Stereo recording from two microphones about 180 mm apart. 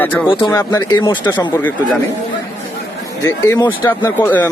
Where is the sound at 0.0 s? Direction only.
10° left (ahead or behind).